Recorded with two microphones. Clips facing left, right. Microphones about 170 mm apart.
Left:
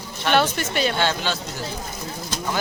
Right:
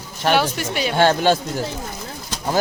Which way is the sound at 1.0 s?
45° right (ahead or behind).